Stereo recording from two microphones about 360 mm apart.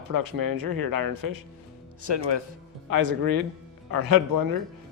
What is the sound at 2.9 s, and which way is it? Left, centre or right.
Speech, right.